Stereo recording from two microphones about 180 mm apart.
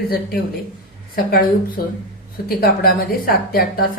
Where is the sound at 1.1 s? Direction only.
55° left (ahead or behind).